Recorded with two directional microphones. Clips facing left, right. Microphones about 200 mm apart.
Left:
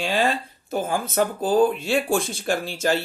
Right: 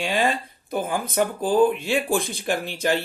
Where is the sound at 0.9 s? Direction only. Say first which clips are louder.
Left 1 dB; 15° right (ahead or behind).